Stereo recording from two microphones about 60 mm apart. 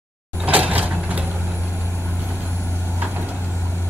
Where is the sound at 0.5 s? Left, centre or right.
Right.